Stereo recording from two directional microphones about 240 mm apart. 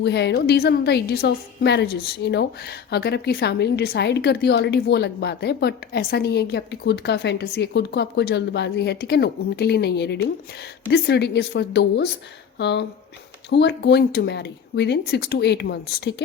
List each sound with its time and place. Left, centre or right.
0.0 s a woman's voice: left